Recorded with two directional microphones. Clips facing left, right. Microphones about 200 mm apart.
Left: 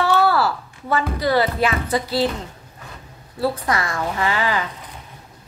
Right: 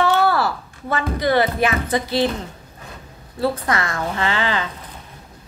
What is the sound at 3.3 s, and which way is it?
A woman's voice, 25° right (ahead or behind).